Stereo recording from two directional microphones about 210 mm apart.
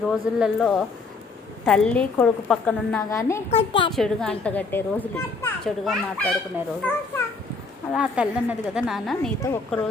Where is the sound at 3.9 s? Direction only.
Centre (ahead or behind).